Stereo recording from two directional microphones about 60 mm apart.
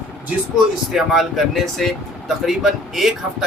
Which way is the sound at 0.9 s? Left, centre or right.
Centre.